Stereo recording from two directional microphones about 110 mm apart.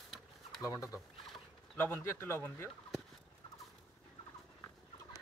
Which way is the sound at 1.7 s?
15° left (ahead or behind).